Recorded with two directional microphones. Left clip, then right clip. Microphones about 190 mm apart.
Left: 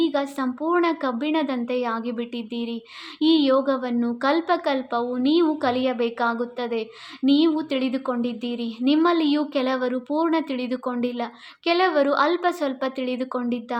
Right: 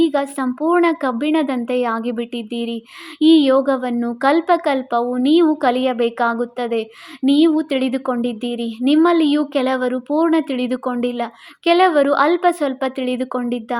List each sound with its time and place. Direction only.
0.0 s speech: 30° right (ahead or behind)